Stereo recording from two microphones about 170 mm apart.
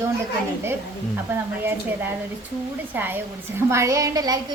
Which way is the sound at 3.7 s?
15° right (ahead or behind).